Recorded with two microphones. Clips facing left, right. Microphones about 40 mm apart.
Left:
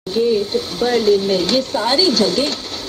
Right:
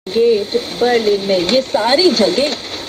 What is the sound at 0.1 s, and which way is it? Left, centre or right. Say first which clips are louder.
Speech: right 3 dB; right.